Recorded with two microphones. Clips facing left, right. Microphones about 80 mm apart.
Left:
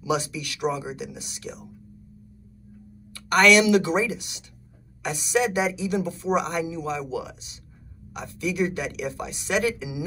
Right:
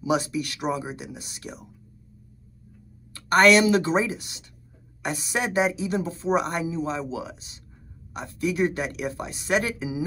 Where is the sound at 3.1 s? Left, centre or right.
Right.